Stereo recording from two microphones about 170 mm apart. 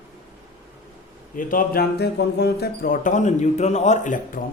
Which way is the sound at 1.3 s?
55° left (ahead or behind).